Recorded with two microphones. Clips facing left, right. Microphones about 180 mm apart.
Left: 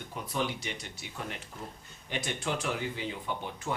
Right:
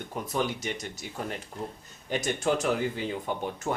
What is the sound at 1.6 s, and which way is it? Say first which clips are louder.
Speech: right 9 dB; centre (ahead or behind).